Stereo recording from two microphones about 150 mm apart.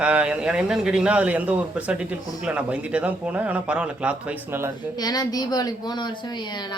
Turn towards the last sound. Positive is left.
turn(degrees=30)  # may be behind; listen again after turning